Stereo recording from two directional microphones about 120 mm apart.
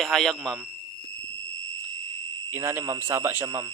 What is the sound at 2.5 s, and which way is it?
Speech, 20° right (ahead or behind).